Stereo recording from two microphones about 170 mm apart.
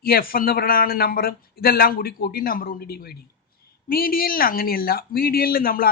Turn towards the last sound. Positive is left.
turn(degrees=60)  # may be behind; listen again after turning